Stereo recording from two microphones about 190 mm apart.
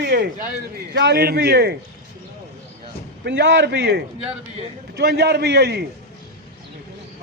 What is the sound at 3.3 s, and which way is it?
A man's voice, 65° right (ahead or behind).